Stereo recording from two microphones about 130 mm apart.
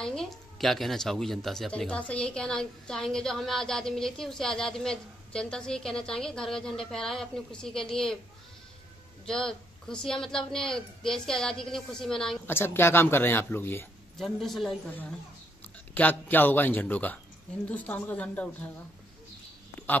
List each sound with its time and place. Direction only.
0.0 s speech: 5° left (ahead or behind)
9.2 s speech: 5° left (ahead or behind)
12.4 s speech: 15° left (ahead or behind)
14.1 s speech: centre (ahead or behind)
14.9 s speech: 15° left (ahead or behind)